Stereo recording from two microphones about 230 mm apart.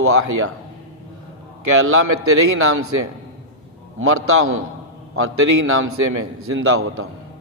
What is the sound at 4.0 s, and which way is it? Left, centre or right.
Speech, right.